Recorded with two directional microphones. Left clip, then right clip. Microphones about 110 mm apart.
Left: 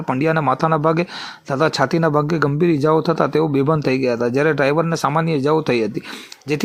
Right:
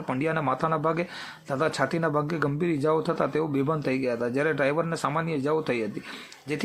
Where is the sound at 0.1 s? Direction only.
35° left (ahead or behind).